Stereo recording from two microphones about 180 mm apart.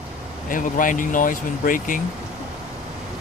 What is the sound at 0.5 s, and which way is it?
Speech, 50° left (ahead or behind).